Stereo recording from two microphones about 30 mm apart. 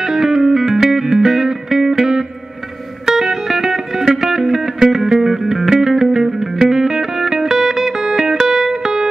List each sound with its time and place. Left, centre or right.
0.0 s music: centre